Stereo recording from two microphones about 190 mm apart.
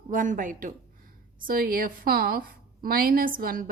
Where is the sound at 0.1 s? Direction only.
45° right (ahead or behind).